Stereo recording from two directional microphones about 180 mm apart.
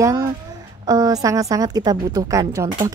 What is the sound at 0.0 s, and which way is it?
Speech, 15° right (ahead or behind).